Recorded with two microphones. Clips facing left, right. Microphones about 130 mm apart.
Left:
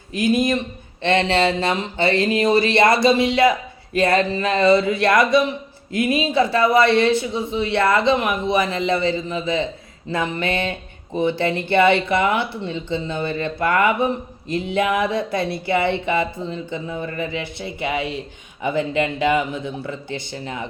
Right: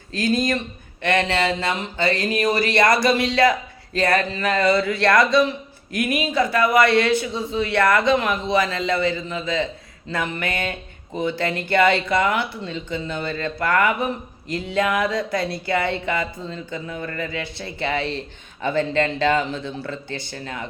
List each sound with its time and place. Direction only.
0.1 s speech: 20° left (ahead or behind)